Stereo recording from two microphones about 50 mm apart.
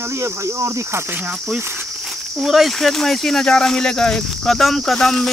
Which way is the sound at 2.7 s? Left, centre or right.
Centre.